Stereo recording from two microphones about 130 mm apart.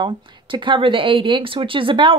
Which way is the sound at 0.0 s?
40° right (ahead or behind).